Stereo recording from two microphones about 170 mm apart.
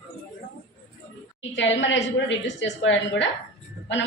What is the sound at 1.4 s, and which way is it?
A woman's voice, 90° left.